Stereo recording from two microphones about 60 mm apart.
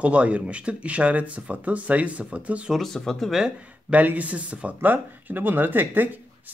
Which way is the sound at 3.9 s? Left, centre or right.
Right.